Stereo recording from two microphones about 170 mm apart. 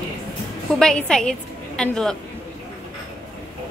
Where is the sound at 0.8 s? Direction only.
5° left (ahead or behind).